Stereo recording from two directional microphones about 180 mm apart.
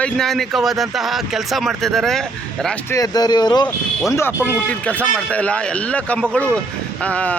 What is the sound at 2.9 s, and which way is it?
Speech, 20° left (ahead or behind).